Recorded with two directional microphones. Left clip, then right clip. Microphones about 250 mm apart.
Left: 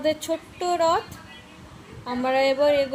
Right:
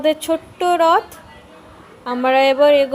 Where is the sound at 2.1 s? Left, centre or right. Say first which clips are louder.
Right 7 dB; right.